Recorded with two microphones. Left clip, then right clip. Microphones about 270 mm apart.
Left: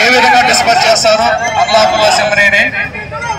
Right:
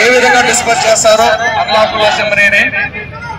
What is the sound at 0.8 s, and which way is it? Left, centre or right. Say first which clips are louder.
A man's voice: right 1 dB; right.